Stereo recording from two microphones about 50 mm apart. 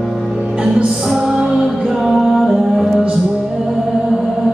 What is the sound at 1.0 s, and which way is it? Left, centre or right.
Music, centre.